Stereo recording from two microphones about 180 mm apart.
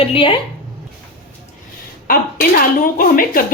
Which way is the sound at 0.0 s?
30° left (ahead or behind).